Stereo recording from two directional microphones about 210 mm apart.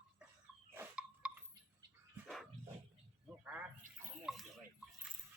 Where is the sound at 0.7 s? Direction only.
5° right (ahead or behind).